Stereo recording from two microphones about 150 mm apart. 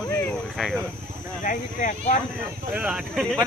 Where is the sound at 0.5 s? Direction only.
Centre (ahead or behind).